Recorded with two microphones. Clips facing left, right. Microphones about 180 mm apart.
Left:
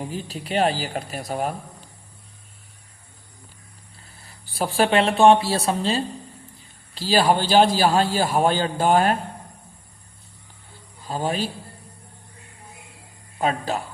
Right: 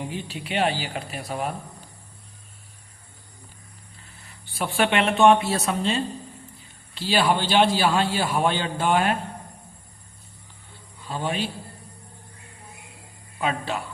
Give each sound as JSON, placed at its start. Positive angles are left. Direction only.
{"t": 0.1, "sound": "a man's voice", "side_deg": 40}
{"t": 4.0, "sound": "a man's voice", "side_deg": 35}
{"t": 11.0, "sound": "a man's voice", "side_deg": 40}
{"t": 13.4, "sound": "a man's voice", "side_deg": 40}